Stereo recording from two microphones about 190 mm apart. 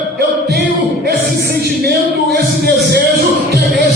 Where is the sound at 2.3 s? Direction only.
60° right (ahead or behind).